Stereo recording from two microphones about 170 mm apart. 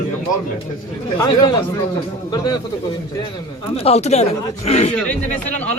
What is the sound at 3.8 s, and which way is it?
Speech, 40° left (ahead or behind).